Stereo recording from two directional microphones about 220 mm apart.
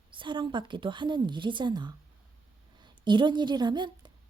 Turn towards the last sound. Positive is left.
turn(degrees=-20)  # may be behind; listen again after turning